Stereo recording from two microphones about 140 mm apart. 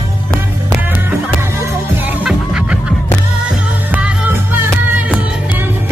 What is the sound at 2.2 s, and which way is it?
Music, 5° right (ahead or behind).